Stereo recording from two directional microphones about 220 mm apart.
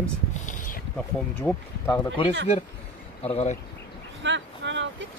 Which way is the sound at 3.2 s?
30° left (ahead or behind).